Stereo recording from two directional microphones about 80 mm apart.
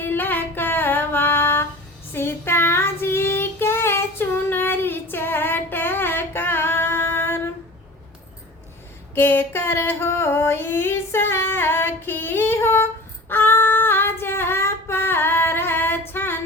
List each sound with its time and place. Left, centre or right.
0.0 s child singing: left
9.1 s female singing: left